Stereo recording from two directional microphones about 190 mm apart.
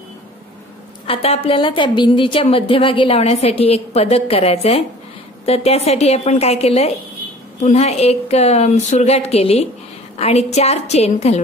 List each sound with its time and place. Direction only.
1.0 s a woman's voice: 30° left (ahead or behind)